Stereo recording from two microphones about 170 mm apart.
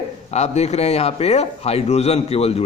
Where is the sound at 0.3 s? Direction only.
40° left (ahead or behind).